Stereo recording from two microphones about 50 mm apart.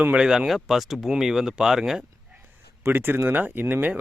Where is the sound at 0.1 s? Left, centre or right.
Centre.